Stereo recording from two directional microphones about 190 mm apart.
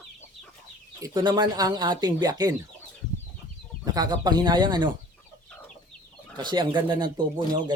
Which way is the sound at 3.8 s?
20° right (ahead or behind).